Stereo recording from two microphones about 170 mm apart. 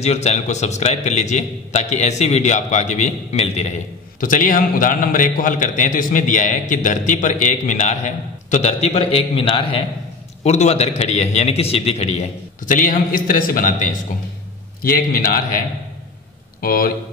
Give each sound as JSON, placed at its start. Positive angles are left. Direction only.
{"t": 0.0, "sound": "a man's voice", "side_deg": 40}
{"t": 16.6, "sound": "a man's voice", "side_deg": 55}